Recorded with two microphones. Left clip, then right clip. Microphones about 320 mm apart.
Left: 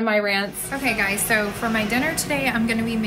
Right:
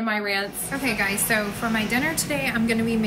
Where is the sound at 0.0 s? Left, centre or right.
Centre.